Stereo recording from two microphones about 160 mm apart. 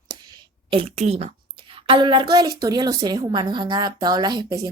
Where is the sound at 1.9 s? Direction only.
30° right (ahead or behind).